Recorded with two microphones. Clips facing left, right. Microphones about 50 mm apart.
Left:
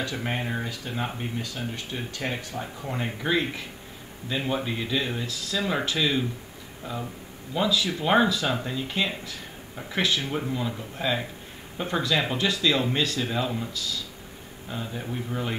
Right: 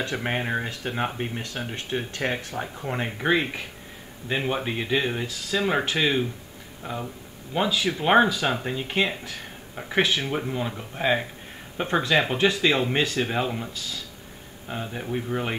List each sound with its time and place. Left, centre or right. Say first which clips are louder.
0.0 s speech: right 2 dB; right
2.5 s speech: right 3 dB; right
7.5 s speech: right 1 dB; right
15.3 s speech: right 3 dB; right